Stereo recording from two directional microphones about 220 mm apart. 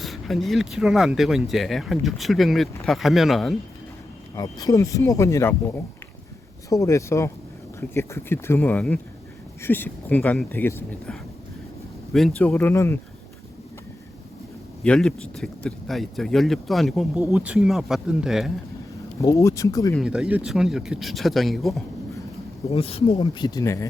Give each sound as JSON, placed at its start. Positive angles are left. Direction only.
{"t": 0.0, "sound": "speech", "side_deg": 0}
{"t": 4.4, "sound": "speech", "side_deg": 15}
{"t": 14.8, "sound": "speech", "side_deg": 5}
{"t": 19.2, "sound": "speech", "side_deg": 15}
{"t": 20.0, "sound": "speech", "side_deg": -5}
{"t": 22.7, "sound": "speech", "side_deg": 25}